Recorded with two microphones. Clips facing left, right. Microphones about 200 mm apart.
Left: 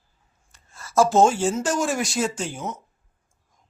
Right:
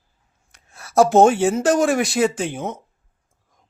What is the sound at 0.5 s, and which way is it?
A man's voice, 65° right (ahead or behind).